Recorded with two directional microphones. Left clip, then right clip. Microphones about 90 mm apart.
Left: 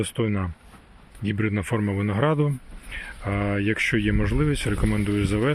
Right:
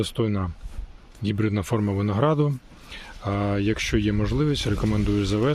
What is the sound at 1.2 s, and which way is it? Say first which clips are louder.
Speech: even; 25° right (ahead or behind).